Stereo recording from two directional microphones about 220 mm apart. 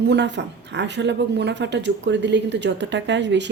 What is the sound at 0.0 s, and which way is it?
Speech, 50° right (ahead or behind).